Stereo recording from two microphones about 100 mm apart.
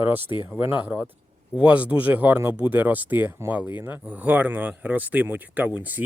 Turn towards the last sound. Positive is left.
turn(degrees=-15)  # may be behind; listen again after turning